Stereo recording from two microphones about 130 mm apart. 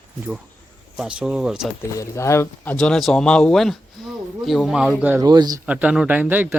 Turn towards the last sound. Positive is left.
turn(degrees=-15)  # may be behind; listen again after turning